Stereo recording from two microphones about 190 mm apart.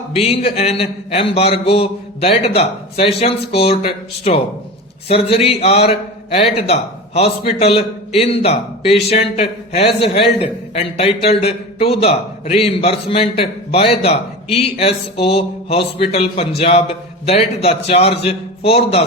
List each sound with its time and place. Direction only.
0.1 s a man's voice: 30° left (ahead or behind)